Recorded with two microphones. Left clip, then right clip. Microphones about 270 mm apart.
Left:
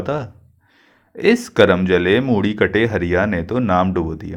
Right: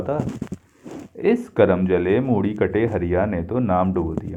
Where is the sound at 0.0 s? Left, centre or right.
Left.